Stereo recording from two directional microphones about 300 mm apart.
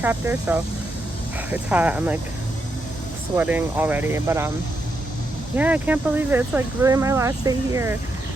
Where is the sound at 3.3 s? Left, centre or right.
Centre.